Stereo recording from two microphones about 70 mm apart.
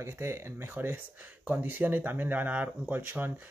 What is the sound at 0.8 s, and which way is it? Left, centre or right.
Speech, right.